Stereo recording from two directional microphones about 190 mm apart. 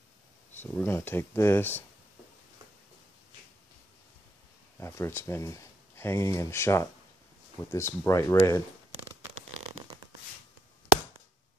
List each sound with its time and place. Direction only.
0.6 s speech: 10° left (ahead or behind)
4.7 s speech: 15° left (ahead or behind)